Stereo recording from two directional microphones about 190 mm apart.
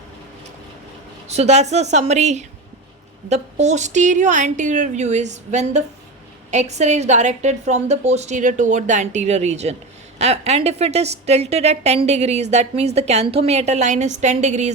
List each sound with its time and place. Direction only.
1.3 s a woman's voice: 35° right (ahead or behind)